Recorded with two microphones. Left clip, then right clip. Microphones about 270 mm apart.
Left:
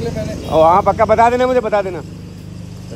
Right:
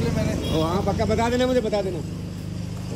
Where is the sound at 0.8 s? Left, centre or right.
Left.